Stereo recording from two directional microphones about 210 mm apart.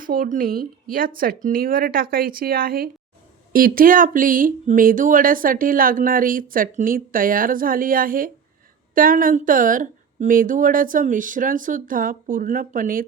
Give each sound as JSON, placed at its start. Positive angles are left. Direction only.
{"t": 0.0, "sound": "speech", "side_deg": -40}